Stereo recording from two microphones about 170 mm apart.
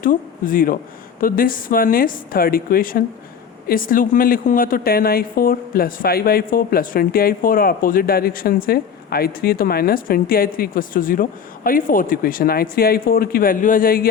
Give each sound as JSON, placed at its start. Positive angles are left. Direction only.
{"t": 0.0, "sound": "a woman's voice", "side_deg": 55}